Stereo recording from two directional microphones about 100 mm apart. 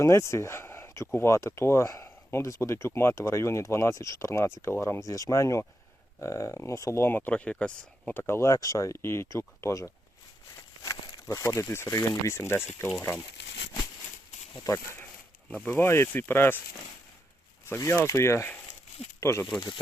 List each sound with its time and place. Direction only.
0.0 s speech: 30° left (ahead or behind); by 8.1 s 10° left (ahead or behind)
8.1 s speech: 25° left (ahead or behind)
14.6 s speech: 35° left (ahead or behind)
15.4 s speech: 15° left (ahead or behind)
17.7 s speech: 25° left (ahead or behind)
19.5 s speech: 50° left (ahead or behind)